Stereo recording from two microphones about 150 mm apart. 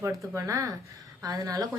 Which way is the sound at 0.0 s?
20° right (ahead or behind).